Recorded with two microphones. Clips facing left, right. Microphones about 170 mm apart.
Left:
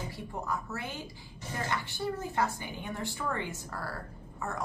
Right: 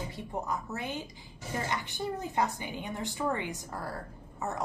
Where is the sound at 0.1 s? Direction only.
20° right (ahead or behind).